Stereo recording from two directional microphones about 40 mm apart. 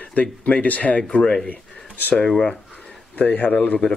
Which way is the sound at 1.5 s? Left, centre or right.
Left.